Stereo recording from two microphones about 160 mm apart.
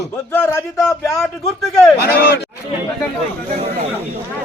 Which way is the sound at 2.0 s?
90° left.